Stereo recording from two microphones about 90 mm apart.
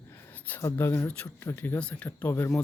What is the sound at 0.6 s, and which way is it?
Speech, 25° left (ahead or behind).